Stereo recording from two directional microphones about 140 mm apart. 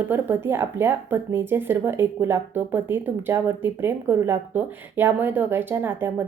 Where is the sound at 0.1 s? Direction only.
15° right (ahead or behind).